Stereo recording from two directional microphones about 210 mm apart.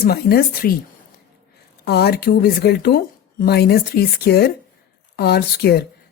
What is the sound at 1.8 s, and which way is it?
Speech, 50° left (ahead or behind).